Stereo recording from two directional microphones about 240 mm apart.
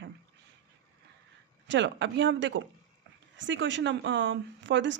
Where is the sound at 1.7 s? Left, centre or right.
Right.